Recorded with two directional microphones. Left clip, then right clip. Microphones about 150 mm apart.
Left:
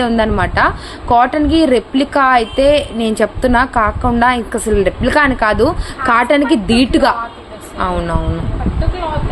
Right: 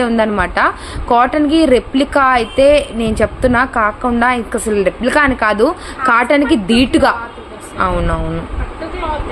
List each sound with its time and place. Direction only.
0.0 s a woman's voice: centre (ahead or behind)